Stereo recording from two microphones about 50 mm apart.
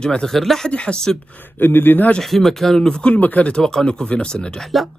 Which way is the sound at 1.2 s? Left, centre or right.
Left.